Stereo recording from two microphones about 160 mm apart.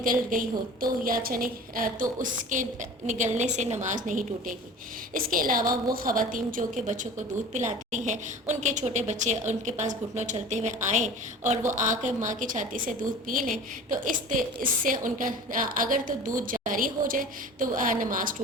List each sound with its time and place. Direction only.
0.0 s a woman's voice: 60° right (ahead or behind)